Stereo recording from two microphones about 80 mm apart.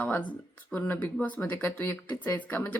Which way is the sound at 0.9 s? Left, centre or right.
Centre.